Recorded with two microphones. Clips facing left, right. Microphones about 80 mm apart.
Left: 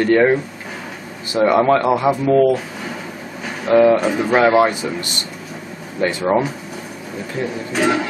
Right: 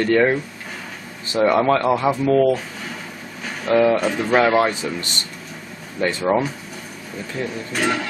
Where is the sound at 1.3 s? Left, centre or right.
Centre.